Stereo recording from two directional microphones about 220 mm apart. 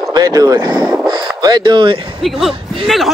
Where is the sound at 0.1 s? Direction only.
15° right (ahead or behind).